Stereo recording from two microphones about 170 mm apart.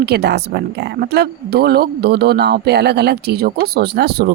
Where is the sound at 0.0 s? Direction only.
75° right (ahead or behind).